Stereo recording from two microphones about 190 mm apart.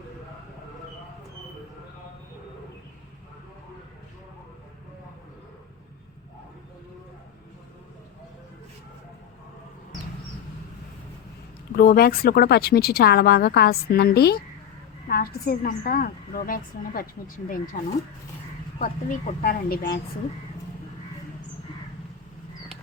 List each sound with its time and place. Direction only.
11.8 s a woman's voice: 50° left (ahead or behind)
18.8 s a woman's voice: 45° left (ahead or behind)